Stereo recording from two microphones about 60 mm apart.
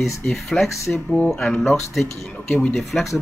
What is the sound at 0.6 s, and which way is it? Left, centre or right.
Speech, left.